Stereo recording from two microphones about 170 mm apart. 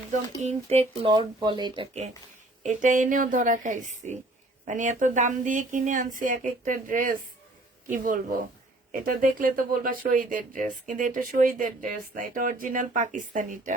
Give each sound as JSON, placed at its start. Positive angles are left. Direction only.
{"t": 0.1, "sound": "speech", "side_deg": -40}
{"t": 2.6, "sound": "speech", "side_deg": -50}